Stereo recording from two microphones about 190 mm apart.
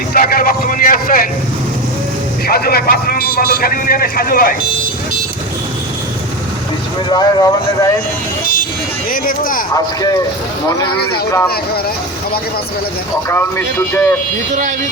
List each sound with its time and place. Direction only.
0.1 s vehicle: 50° left (ahead or behind)
2.5 s a man's voice: 55° left (ahead or behind)
7.1 s speech: 20° left (ahead or behind)
9.0 s a man's voice: 45° left (ahead or behind)
9.7 s speech: 20° left (ahead or behind)
13.2 s speech: 10° left (ahead or behind)